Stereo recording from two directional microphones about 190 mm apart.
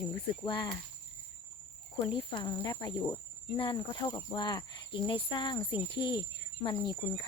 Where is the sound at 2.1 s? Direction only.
25° left (ahead or behind).